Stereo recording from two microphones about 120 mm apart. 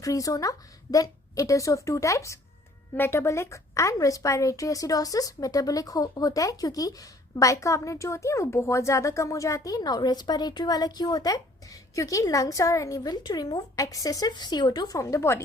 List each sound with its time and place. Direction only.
0.0 s speech: 30° left (ahead or behind)